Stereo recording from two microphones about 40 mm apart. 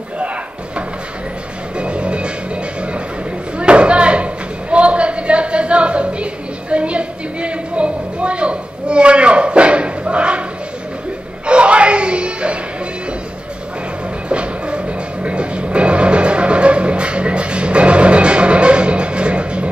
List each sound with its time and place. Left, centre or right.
1.8 s music: right
3.5 s a sound: right
11.4 s music: right
14.3 s music: right